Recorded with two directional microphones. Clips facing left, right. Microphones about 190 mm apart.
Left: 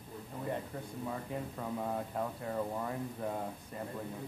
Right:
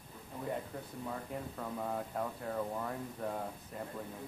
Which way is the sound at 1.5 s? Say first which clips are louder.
Left 1 dB; 5° left (ahead or behind).